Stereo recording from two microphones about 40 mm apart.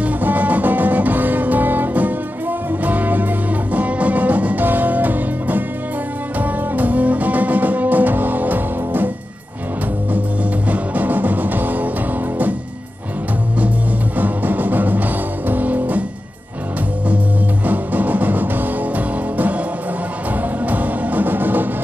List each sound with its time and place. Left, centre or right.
0.2 s music: right
10.7 s music: right
14.1 s music: right
17.6 s music: right
20.6 s music: right